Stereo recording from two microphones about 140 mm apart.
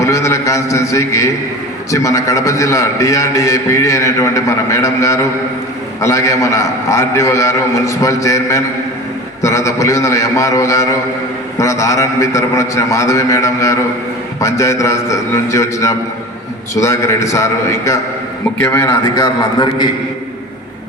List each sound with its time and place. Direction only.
0.0 s a man's voice: 20° left (ahead or behind)